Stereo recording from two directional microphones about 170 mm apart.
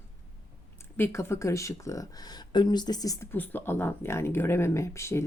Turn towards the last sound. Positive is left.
turn(degrees=15)  # may be behind; listen again after turning